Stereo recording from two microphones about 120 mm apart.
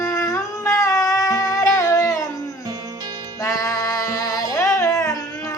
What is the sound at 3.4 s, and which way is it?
Music, 30° left (ahead or behind).